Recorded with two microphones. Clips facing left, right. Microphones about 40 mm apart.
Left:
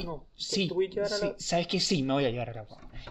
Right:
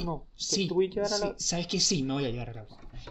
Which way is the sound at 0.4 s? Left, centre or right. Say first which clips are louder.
Left 1 dB; left.